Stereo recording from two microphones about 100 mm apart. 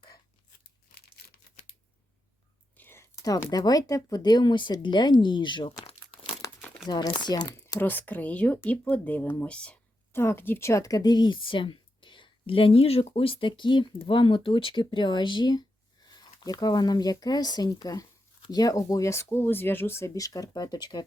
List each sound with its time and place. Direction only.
2.7 s whispering: 20° left (ahead or behind)
3.5 s a woman's voice: 40° left (ahead or behind)
6.4 s crumpling: 35° left (ahead or behind)
6.8 s speech: 45° left (ahead or behind)
7.8 s speech: 20° left (ahead or behind)
10.1 s a woman's voice: 25° left (ahead or behind); by 21.0 s 45° left (ahead or behind)